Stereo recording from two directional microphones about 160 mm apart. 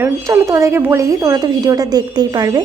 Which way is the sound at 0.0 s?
20° right (ahead or behind).